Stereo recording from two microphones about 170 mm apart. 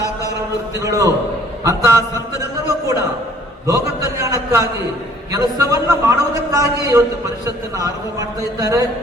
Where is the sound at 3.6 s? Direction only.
20° right (ahead or behind).